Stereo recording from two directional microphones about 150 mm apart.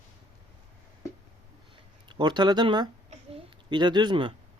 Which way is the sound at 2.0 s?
30° right (ahead or behind).